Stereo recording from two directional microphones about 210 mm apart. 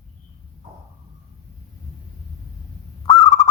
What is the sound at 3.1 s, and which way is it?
Fowl, 15° left (ahead or behind).